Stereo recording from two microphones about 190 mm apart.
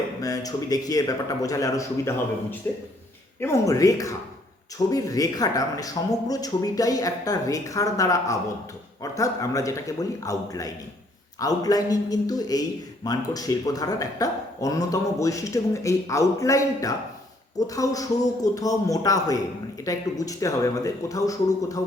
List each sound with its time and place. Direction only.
0.2 s speech: 20° left (ahead or behind)